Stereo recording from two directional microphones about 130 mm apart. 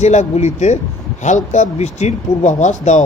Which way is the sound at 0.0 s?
60° left (ahead or behind).